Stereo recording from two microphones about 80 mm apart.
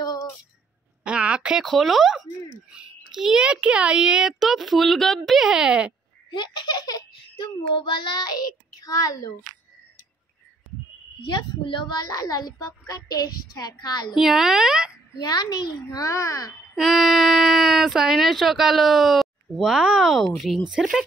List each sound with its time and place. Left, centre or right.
0.0 s a sound: left
1.0 s a sound: centre
1.7 s a child's voice: centre
6.3 s a child's voice: left
11.2 s a child's voice: left
14.1 s a child's voice: centre
15.1 s a child's voice: left
16.7 s speech: centre